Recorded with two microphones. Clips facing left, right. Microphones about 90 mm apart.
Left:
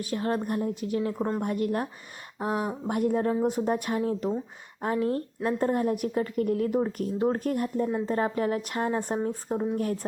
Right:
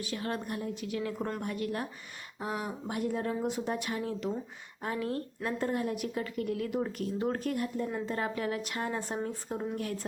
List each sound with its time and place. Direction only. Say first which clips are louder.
0.0 s a woman's voice: left 7 dB; 45° left (ahead or behind)
1.4 s a woman's voice: left 7 dB; 45° left (ahead or behind)